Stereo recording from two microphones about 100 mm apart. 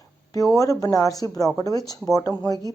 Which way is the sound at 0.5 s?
35° left (ahead or behind).